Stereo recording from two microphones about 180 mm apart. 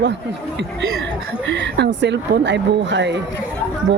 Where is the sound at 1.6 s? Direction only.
75° right (ahead or behind).